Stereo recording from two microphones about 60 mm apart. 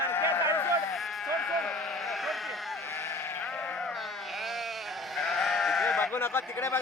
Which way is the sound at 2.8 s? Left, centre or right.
Left.